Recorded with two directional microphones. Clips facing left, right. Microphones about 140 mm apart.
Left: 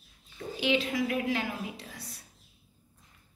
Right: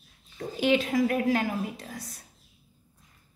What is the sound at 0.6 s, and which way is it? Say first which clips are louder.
A woman's voice: right 5 dB; 45° right (ahead or behind).